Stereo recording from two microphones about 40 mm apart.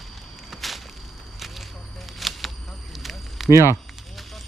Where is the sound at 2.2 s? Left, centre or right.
Centre.